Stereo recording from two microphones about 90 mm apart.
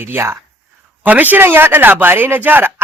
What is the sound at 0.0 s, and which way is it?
Speech, 25° right (ahead or behind).